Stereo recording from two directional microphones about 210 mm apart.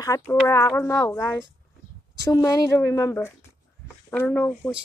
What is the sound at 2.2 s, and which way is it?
Speech, 15° left (ahead or behind).